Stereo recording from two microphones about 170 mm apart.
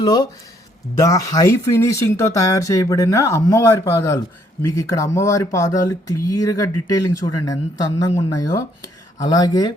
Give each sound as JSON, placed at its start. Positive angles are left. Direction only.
{"t": 0.0, "sound": "speech", "side_deg": 25}